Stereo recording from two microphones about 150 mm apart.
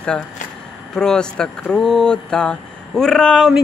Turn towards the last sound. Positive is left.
turn(degrees=5)  # may be behind; listen again after turning